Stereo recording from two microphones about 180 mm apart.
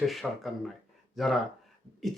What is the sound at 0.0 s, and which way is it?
Speech, centre (ahead or behind).